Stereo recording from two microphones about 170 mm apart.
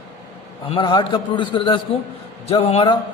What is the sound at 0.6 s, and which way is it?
A man's voice, 30° left (ahead or behind).